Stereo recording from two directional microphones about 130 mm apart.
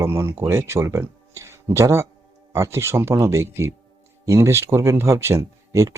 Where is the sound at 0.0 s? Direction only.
20° right (ahead or behind).